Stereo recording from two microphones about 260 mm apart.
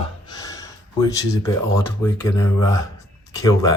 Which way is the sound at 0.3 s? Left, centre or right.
Centre.